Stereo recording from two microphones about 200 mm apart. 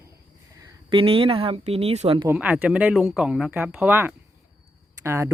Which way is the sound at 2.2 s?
10° right (ahead or behind).